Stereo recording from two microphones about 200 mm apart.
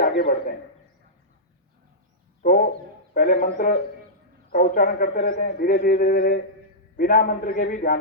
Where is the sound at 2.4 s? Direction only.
45° left (ahead or behind).